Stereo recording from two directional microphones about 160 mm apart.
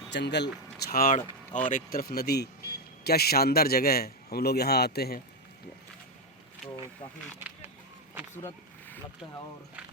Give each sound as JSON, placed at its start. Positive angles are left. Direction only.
{"t": 0.1, "sound": "a man's voice", "side_deg": 90}